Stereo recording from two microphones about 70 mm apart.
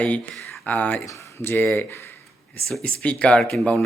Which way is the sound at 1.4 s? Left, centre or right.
Left.